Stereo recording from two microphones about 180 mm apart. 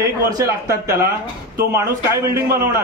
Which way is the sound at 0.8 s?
60° right (ahead or behind).